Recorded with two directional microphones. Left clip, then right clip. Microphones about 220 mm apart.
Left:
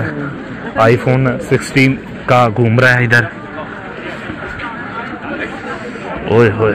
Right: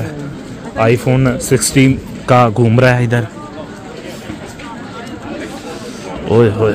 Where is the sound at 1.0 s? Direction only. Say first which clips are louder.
Even; 45° right (ahead or behind).